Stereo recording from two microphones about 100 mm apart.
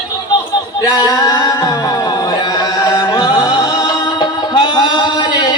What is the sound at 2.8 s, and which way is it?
Music, 40° left (ahead or behind).